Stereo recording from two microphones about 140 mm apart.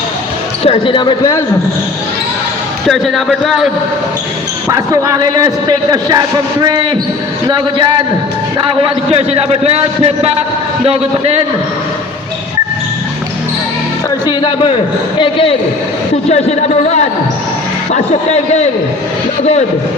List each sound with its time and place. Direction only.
0.6 s speech: 40° left (ahead or behind)
2.8 s speech: centre (ahead or behind)
4.7 s a man's voice: 25° right (ahead or behind)
9.0 s a man's voice: 50° right (ahead or behind)
14.3 s speech: 35° left (ahead or behind)
16.3 s a man's voice: 50° left (ahead or behind)